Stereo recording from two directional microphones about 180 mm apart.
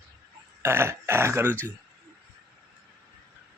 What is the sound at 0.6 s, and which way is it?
Speech, 15° right (ahead or behind).